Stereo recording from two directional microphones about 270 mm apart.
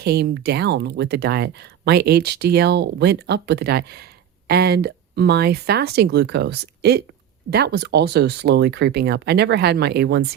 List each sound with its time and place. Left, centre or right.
0.0 s speech: right